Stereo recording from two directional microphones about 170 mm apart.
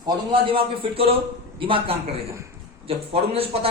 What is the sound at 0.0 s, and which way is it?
A man's voice, 25° right (ahead or behind).